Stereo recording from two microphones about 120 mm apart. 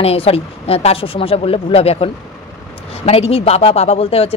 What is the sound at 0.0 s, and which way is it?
A woman's voice, 55° left (ahead or behind).